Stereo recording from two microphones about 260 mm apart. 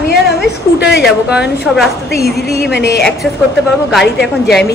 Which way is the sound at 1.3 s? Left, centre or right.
Centre.